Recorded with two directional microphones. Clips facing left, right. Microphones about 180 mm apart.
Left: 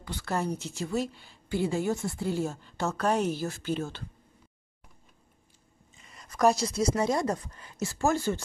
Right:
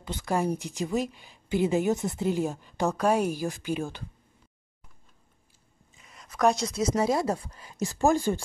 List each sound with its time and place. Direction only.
0.0 s speech: 20° right (ahead or behind)
5.9 s a sound: centre (ahead or behind)
7.0 s speech: 5° right (ahead or behind)